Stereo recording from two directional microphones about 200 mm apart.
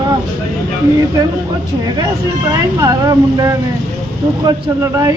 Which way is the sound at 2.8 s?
15° right (ahead or behind).